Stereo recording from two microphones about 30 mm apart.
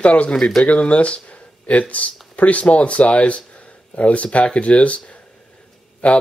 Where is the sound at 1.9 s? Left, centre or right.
Left.